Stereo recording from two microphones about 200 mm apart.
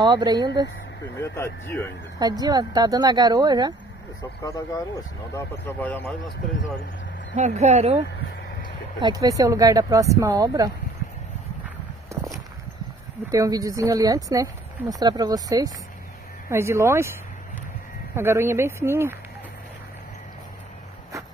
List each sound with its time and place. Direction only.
0.0 s speech: 20° right (ahead or behind)
1.2 s speech: 15° left (ahead or behind)
2.1 s speech: 20° right (ahead or behind)
4.4 s speech: 15° left (ahead or behind)
7.3 s speech: 35° right (ahead or behind)
9.0 s speech: 20° right (ahead or behind)
13.3 s speech: 15° right (ahead or behind)
18.1 s speech: 10° right (ahead or behind)